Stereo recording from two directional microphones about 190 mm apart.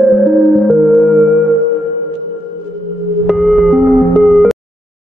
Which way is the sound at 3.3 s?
Centre (ahead or behind).